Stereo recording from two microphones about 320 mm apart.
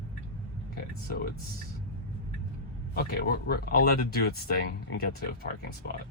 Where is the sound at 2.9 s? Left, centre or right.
Left.